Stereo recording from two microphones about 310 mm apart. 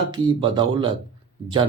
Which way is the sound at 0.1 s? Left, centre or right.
Centre.